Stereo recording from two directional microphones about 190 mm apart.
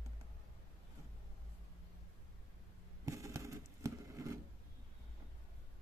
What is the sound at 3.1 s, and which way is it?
Patter, 15° right (ahead or behind).